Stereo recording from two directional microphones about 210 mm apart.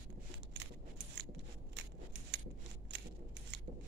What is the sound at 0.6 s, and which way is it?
Keys jangling, 55° right (ahead or behind).